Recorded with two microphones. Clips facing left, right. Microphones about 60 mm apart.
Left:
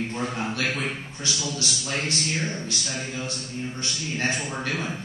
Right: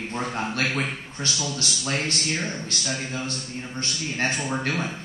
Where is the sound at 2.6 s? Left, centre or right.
Right.